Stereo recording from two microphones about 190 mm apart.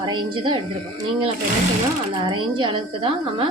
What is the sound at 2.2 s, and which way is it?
A woman's voice, 25° right (ahead or behind).